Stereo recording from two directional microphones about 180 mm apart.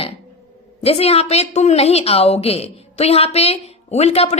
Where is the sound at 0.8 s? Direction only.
35° left (ahead or behind).